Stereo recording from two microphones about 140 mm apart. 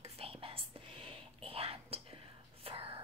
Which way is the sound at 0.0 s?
45° right (ahead or behind).